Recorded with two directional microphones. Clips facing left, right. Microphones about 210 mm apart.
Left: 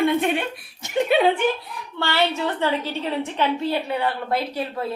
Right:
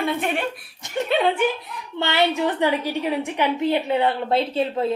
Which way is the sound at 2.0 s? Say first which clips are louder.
Right 2 dB; 20° right (ahead or behind).